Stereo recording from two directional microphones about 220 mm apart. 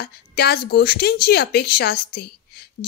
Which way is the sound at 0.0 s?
45° left (ahead or behind).